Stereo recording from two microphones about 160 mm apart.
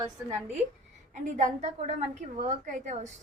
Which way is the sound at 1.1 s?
45° right (ahead or behind).